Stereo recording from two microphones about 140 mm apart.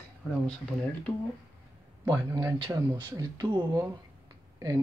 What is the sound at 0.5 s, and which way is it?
Speech, 5° left (ahead or behind).